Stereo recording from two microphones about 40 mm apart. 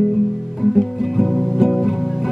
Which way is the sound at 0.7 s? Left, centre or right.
Centre.